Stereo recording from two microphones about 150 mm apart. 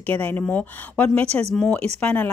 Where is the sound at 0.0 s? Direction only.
10° left (ahead or behind).